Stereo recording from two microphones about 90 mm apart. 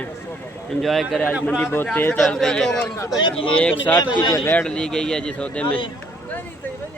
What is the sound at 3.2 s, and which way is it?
Speech, 60° left (ahead or behind).